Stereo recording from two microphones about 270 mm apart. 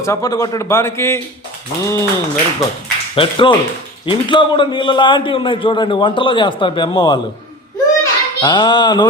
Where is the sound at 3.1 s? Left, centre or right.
Centre.